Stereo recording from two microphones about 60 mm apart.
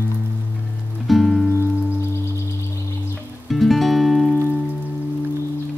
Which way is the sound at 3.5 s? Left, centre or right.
Centre.